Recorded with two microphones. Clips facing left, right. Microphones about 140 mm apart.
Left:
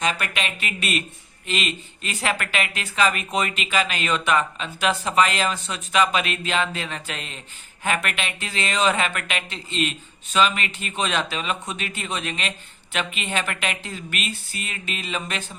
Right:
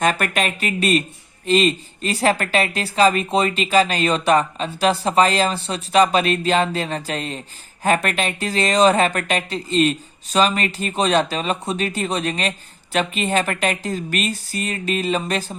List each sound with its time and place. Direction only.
0.0 s speech: 50° right (ahead or behind)